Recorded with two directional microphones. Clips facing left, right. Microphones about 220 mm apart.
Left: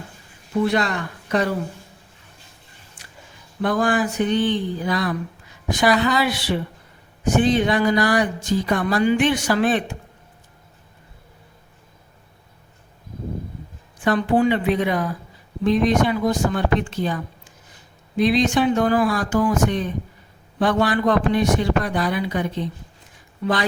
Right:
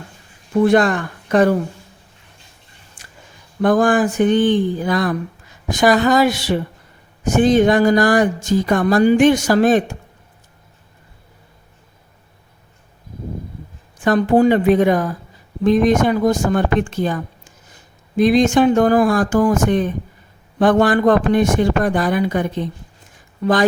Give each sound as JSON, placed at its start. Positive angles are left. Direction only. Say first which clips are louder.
{"t": 0.6, "sound": "speech", "louder": "right 7 dB", "side_deg": -50}
{"t": 3.0, "sound": "a sound", "louder": "right 2 dB", "side_deg": -50}
{"t": 3.6, "sound": "speech", "louder": "right 6 dB", "side_deg": -50}
{"t": 14.0, "sound": "speech", "louder": "right 5 dB", "side_deg": -45}